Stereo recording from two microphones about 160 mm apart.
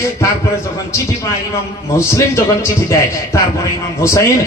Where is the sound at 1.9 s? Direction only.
15° left (ahead or behind).